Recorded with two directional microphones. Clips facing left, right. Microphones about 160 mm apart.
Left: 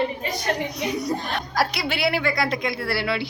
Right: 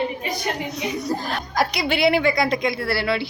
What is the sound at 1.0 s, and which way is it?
A woman's voice, centre (ahead or behind).